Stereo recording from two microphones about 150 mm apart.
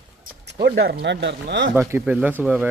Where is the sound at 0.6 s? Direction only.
90° right.